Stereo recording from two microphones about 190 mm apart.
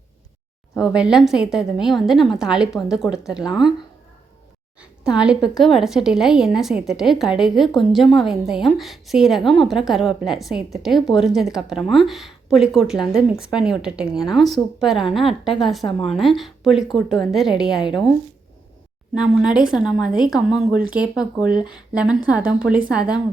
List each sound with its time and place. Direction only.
0.7 s a woman's voice: 5° right (ahead or behind)
4.8 s a woman's voice: 5° right (ahead or behind)
15.8 s speech: 30° left (ahead or behind)
16.1 s a woman's voice: centre (ahead or behind)
19.1 s a woman's voice: 5° right (ahead or behind)